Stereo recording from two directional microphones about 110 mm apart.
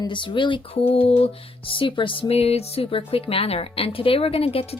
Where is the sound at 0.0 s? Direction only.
50° left (ahead or behind).